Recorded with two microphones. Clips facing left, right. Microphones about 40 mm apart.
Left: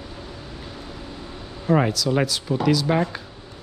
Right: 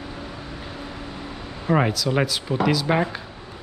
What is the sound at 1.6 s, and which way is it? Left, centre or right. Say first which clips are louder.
Speech: left 1 dB; centre.